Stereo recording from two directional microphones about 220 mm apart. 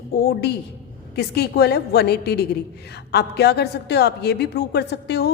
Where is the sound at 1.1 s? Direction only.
45° left (ahead or behind).